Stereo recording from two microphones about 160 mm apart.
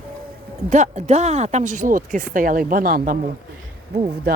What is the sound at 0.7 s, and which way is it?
Speech, 50° right (ahead or behind).